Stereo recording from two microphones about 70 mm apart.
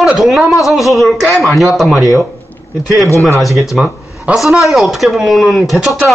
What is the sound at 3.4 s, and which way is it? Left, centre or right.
A man's voice, centre.